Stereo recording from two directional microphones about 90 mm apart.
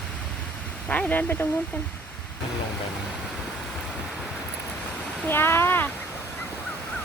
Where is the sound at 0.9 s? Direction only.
20° left (ahead or behind).